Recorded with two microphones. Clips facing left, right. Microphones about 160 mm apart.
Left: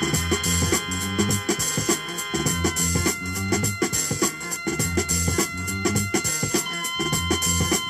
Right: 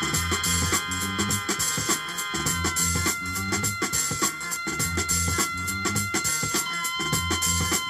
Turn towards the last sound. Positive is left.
turn(degrees=15)  # may be behind; listen again after turning